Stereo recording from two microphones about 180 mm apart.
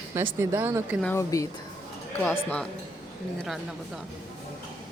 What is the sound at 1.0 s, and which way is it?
Speech, 15° left (ahead or behind).